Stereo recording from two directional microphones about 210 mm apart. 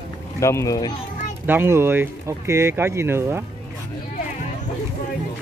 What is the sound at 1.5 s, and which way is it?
Speech, 10° right (ahead or behind).